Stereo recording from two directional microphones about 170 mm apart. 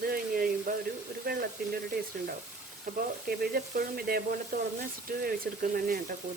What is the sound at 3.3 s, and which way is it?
Speech, 65° right (ahead or behind).